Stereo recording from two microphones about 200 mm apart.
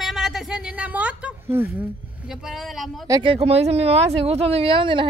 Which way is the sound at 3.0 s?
20° right (ahead or behind).